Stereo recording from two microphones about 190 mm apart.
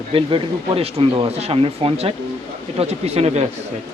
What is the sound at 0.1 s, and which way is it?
Speech, 30° right (ahead or behind).